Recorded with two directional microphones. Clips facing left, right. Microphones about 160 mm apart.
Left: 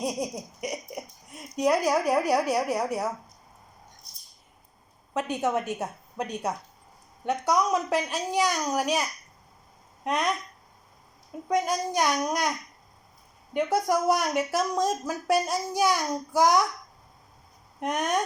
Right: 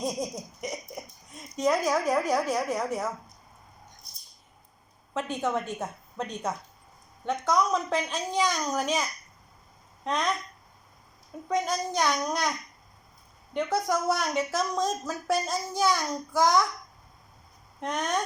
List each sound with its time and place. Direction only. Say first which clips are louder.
0.0 s a sound: left 1 dB; 10° left (ahead or behind)
1.5 s speech: left 2 dB; 10° left (ahead or behind)
5.1 s speech: left 2 dB; 15° left (ahead or behind)
11.4 s speech: left 2 dB; 10° left (ahead or behind)
13.5 s speech: left 3 dB; 10° left (ahead or behind)
17.7 s speech: left 2 dB; 15° left (ahead or behind)